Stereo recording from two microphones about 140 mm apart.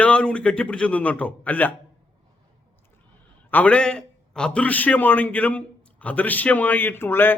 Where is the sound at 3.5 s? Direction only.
10° left (ahead or behind).